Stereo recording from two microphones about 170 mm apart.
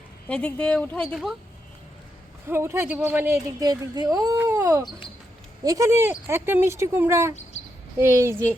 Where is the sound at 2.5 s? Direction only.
15° right (ahead or behind).